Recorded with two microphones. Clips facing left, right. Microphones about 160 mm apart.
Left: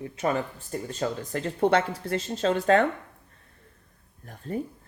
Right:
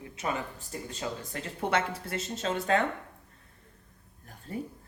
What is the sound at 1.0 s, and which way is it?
Speech, 40° left (ahead or behind).